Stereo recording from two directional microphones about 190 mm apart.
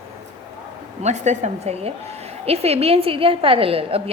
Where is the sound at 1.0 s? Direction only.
35° right (ahead or behind).